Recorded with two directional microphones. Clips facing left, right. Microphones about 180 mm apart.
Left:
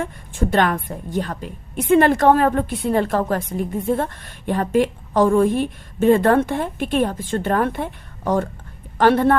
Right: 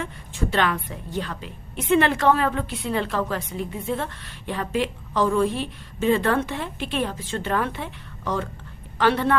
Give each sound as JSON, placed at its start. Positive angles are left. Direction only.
{"t": 0.0, "sound": "a woman's voice", "side_deg": 45}